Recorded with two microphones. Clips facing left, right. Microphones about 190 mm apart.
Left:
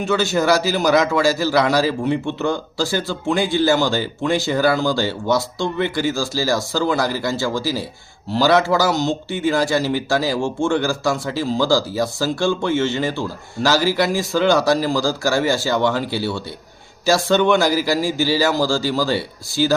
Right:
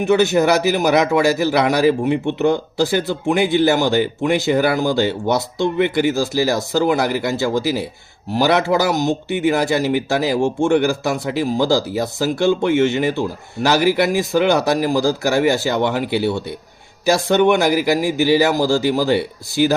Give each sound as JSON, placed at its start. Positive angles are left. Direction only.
{"t": 0.0, "sound": "speech", "side_deg": -20}